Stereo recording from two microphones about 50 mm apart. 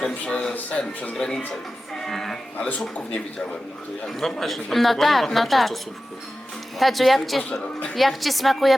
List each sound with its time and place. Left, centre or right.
0.0 s speech: left
1.1 s a woman's voice: centre
4.0 s a woman's voice: centre